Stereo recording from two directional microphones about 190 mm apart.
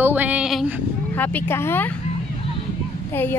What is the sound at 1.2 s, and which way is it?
Speech, 10° left (ahead or behind).